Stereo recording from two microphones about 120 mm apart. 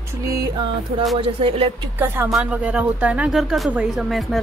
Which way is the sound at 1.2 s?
50° right (ahead or behind).